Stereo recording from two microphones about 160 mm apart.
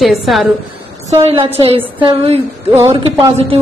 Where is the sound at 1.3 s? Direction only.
35° right (ahead or behind).